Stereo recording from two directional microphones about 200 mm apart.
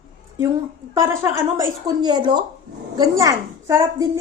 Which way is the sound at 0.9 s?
15° right (ahead or behind).